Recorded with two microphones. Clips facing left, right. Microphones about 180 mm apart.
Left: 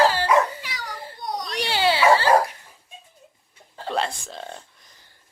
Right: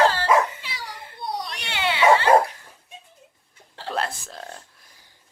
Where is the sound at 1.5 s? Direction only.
35° left (ahead or behind).